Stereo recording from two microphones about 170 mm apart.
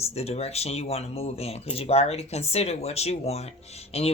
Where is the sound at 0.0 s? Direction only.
35° left (ahead or behind).